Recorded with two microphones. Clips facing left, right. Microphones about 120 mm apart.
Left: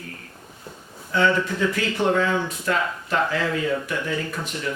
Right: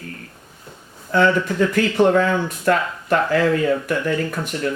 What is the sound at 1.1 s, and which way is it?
Speech, 55° right (ahead or behind).